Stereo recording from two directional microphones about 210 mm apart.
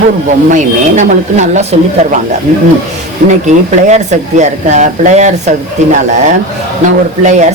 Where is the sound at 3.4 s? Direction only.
35° right (ahead or behind).